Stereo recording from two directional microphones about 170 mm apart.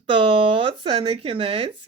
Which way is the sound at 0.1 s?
30° right (ahead or behind).